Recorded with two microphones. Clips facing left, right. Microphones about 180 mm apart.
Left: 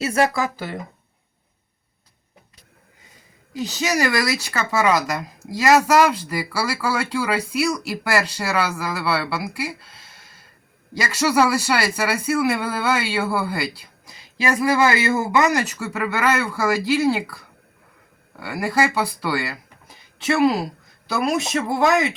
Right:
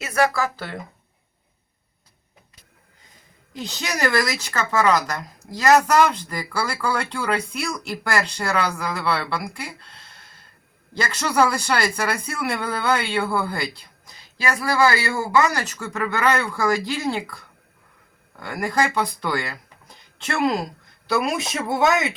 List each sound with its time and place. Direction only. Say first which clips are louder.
0.0 s speech: left 1 dB; 25° left (ahead or behind)
3.5 s speech: left 6 dB; 5° left (ahead or behind)
14.4 s speech: left 2 dB; 20° left (ahead or behind); by 22.1 s centre (ahead or behind)